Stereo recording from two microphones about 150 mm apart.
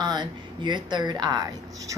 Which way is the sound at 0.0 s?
30° right (ahead or behind).